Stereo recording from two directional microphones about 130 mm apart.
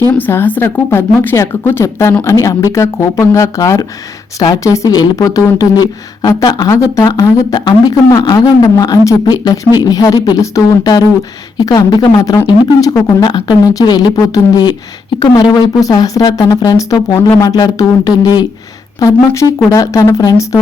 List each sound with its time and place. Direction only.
0.1 s a woman's voice: 15° left (ahead or behind)
13.2 s a woman's voice: 35° left (ahead or behind)